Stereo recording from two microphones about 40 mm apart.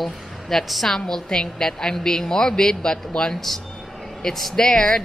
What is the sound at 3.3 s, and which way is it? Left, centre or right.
A woman's voice, centre.